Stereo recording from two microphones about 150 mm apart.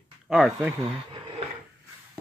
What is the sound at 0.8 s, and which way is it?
Speech, 40° right (ahead or behind).